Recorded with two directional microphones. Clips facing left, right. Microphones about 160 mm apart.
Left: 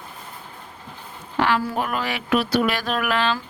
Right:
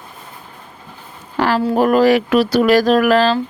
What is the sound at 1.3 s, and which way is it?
Speech, 40° right (ahead or behind).